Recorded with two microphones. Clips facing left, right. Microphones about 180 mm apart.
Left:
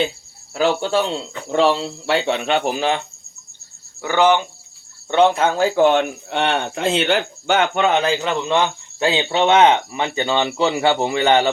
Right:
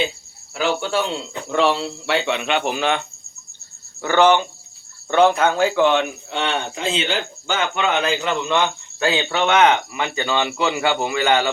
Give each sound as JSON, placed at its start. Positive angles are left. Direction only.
{"t": 0.5, "sound": "speech", "side_deg": 40}
{"t": 4.0, "sound": "speech", "side_deg": 15}
{"t": 5.1, "sound": "speech", "side_deg": 25}
{"t": 8.0, "sound": "speech", "side_deg": 30}